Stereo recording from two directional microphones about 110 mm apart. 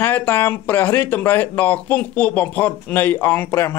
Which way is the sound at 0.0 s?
20° left (ahead or behind).